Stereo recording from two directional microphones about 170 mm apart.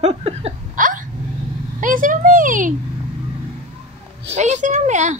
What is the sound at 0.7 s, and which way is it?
Hiccup, 50° right (ahead or behind).